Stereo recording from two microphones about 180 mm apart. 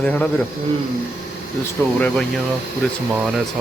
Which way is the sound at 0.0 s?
10° left (ahead or behind).